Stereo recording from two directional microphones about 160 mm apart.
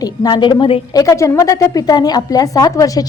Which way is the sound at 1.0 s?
20° left (ahead or behind).